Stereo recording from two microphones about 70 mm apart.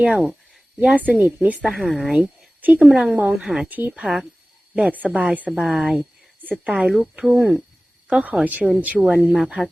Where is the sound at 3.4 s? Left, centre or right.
Centre.